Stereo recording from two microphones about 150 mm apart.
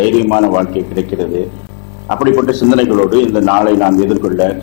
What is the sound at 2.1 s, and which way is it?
A man's voice, 15° left (ahead or behind).